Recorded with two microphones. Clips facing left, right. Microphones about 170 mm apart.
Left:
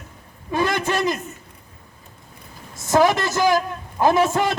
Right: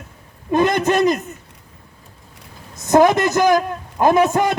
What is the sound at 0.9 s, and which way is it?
Speech, 20° right (ahead or behind).